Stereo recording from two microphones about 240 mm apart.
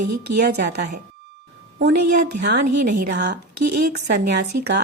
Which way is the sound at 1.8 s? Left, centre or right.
Right.